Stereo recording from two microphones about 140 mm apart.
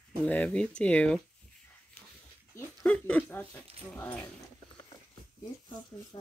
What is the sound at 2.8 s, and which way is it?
Speech, 10° left (ahead or behind).